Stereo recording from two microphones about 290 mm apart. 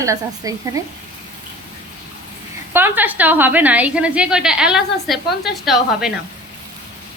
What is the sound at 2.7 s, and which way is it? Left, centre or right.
A woman's voice, centre.